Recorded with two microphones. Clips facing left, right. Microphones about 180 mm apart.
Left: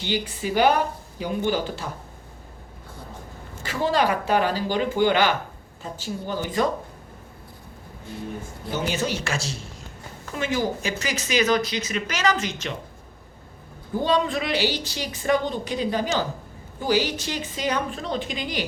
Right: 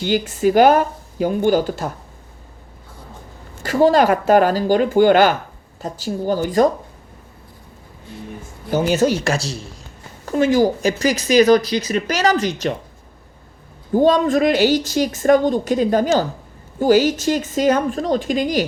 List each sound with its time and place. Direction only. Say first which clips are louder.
0.0 s a woman's voice: right 10 dB; 45° right (ahead or behind)
3.6 s a woman's voice: right 9 dB; 45° right (ahead or behind)
8.7 s speech: right 10 dB; 45° right (ahead or behind)
13.9 s a woman's voice: right 8 dB; 45° right (ahead or behind)